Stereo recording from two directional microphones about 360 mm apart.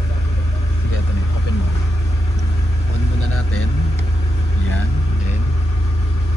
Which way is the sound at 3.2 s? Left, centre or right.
Left.